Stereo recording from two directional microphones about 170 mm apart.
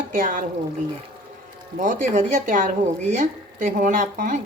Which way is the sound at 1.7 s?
50° right (ahead or behind).